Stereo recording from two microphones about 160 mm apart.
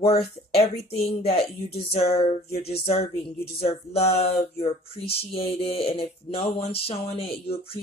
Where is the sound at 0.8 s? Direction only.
35° left (ahead or behind).